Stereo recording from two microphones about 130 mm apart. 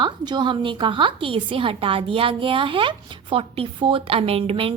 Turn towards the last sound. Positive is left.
turn(degrees=-45)  # may be behind; listen again after turning